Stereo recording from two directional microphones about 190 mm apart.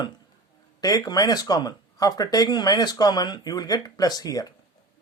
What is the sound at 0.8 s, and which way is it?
Speech, 20° left (ahead or behind).